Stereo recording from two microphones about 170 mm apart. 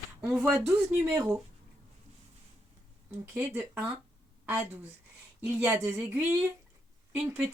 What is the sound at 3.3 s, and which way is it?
A woman's voice, 15° right (ahead or behind).